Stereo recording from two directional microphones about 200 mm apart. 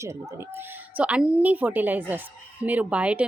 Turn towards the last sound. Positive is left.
turn(degrees=-5)  # may be behind; listen again after turning